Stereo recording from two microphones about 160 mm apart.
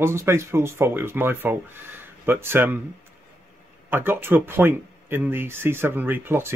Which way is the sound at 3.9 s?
15° right (ahead or behind).